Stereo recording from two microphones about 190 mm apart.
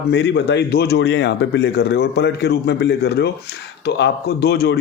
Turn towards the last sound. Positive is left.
turn(degrees=60)  # may be behind; listen again after turning